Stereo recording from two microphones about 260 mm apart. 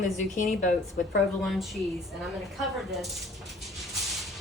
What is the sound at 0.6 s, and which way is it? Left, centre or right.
Speech, left.